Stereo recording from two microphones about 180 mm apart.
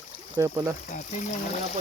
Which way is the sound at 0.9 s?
40° left (ahead or behind).